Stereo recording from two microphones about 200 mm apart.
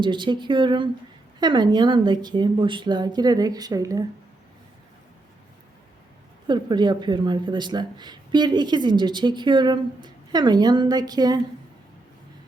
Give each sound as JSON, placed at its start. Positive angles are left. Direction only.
{"t": 0.0, "sound": "speech", "side_deg": -25}
{"t": 6.5, "sound": "speech", "side_deg": -20}